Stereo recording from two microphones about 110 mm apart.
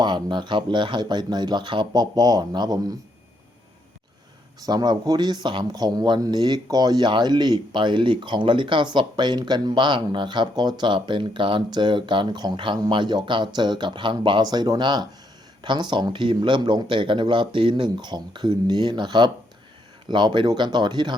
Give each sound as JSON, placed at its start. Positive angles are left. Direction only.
{"t": 0.0, "sound": "speech", "side_deg": -40}
{"t": 4.6, "sound": "speech", "side_deg": -40}